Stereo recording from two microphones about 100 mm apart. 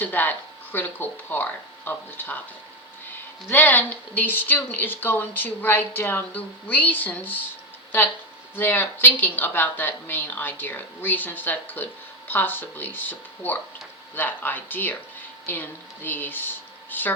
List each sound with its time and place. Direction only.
0.0 s speech: 20° left (ahead or behind)
3.5 s speech: 20° left (ahead or behind)
8.5 s speech: 20° left (ahead or behind)